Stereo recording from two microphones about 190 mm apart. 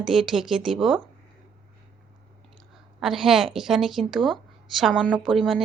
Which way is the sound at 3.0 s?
Centre (ahead or behind).